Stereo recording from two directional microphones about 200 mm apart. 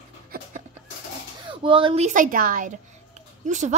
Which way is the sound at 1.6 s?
25° right (ahead or behind).